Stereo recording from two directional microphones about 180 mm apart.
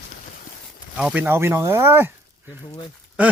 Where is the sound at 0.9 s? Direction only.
5° right (ahead or behind).